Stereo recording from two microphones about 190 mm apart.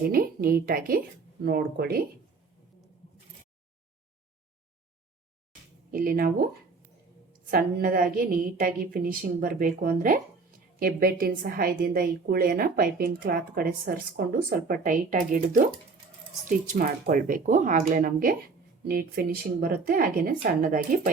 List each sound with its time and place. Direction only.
0.1 s a woman's voice: 50° right (ahead or behind)
5.9 s a woman's voice: 50° right (ahead or behind)
7.5 s a woman's voice: 50° right (ahead or behind)
14.7 s a woman's voice: 45° right (ahead or behind)